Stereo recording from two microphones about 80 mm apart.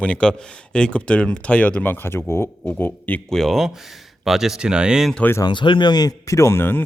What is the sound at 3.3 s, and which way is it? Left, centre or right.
Speech, centre.